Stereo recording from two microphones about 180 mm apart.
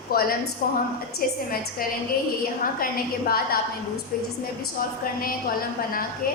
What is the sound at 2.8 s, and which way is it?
Speech, 55° left (ahead or behind).